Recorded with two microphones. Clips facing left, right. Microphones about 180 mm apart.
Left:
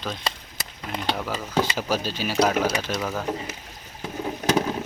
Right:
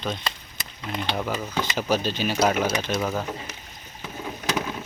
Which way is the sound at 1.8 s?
5° left (ahead or behind).